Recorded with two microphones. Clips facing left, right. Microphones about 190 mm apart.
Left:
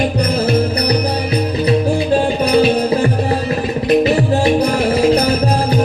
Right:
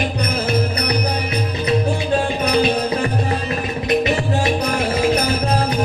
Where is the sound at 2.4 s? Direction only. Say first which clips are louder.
Left 5 dB; 30° left (ahead or behind).